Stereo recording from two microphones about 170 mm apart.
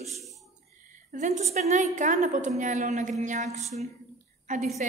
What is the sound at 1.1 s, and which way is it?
A woman's voice, 45° right (ahead or behind).